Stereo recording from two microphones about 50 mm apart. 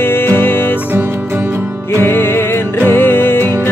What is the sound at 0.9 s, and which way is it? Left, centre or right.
Music, right.